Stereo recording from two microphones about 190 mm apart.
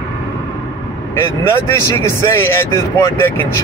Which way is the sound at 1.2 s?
15° left (ahead or behind).